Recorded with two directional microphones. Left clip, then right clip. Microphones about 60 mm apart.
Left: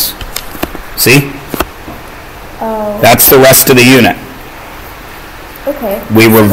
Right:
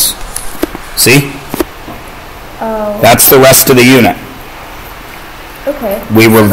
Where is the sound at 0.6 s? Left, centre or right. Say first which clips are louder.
Right 2 dB; left.